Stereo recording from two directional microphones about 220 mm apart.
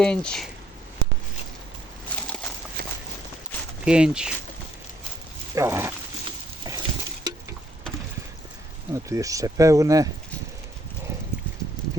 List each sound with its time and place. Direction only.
0.0 s speech: 5° left (ahead or behind)
3.8 s speech: 5° right (ahead or behind)
5.5 s speech: 10° right (ahead or behind)
6.7 s a sound: 15° right (ahead or behind)
8.9 s speech: 15° right (ahead or behind)